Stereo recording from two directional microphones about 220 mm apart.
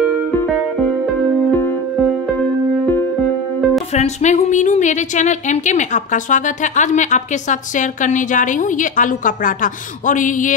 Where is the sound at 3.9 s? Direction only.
30° left (ahead or behind).